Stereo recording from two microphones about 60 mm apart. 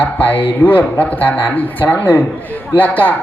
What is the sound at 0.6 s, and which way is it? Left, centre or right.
A man's voice, left.